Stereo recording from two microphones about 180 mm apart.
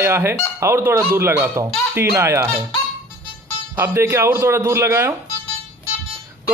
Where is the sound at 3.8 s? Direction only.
15° right (ahead or behind).